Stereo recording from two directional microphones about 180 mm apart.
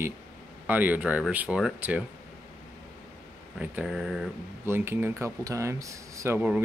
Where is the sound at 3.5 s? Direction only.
5° right (ahead or behind).